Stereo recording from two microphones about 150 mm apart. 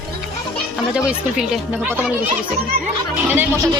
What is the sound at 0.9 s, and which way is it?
Speech, 5° right (ahead or behind).